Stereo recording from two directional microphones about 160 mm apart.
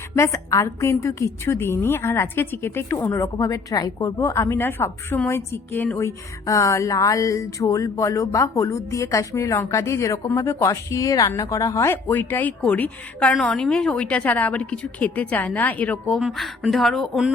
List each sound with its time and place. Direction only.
0.2 s a woman's voice: 20° left (ahead or behind); by 17.3 s centre (ahead or behind)